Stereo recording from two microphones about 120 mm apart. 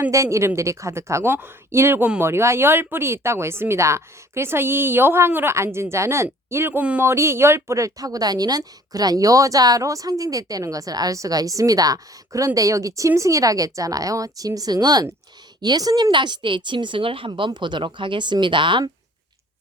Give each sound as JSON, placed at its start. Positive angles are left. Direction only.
{"t": 0.0, "sound": "speech", "side_deg": -25}